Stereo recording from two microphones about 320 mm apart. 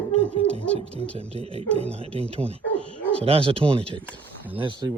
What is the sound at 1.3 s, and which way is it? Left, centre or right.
Speech, centre.